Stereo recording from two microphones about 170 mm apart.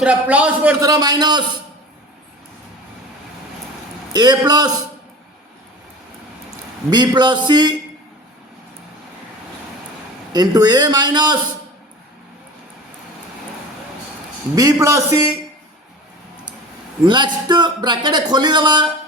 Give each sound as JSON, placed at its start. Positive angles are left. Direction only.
{"t": 0.0, "sound": "a man's voice", "side_deg": -10}
{"t": 0.8, "sound": "speech", "side_deg": -20}
{"t": 4.1, "sound": "speech", "side_deg": -25}
{"t": 6.9, "sound": "speech", "side_deg": -25}
{"t": 10.3, "sound": "speech", "side_deg": -25}
{"t": 14.5, "sound": "speech", "side_deg": -20}
{"t": 17.1, "sound": "speech", "side_deg": -25}